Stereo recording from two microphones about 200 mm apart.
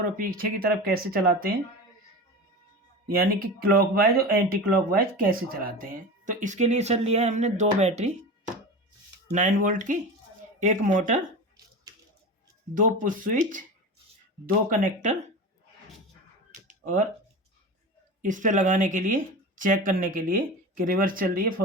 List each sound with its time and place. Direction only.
0.0 s speech: 45° right (ahead or behind)
3.1 s speech: 50° right (ahead or behind); by 8.1 s 35° right (ahead or behind)
9.3 s speech: 40° right (ahead or behind)
12.7 s speech: 40° right (ahead or behind)
16.8 s speech: 40° right (ahead or behind)
18.2 s speech: 40° right (ahead or behind)